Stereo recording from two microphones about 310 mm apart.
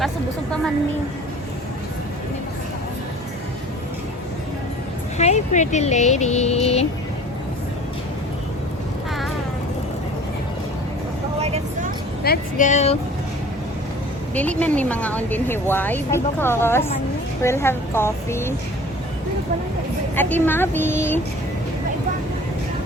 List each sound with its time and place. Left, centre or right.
5.1 s speech: left
11.3 s vehicle: right
12.2 s speech: left
14.3 s a woman's voice: centre
20.1 s a woman's voice: centre